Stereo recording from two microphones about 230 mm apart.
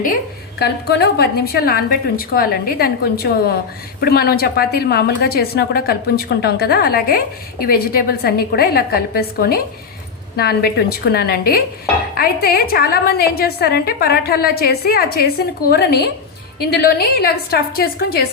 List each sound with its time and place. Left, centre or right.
0.6 s a woman's voice: left